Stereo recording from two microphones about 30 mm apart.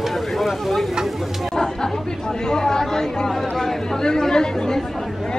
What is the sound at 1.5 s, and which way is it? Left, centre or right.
Chatter, left.